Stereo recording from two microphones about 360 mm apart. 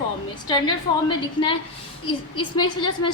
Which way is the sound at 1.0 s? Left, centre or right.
Centre.